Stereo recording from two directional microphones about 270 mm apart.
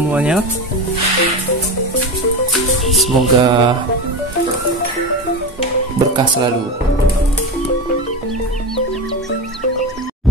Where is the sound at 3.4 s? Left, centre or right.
Centre.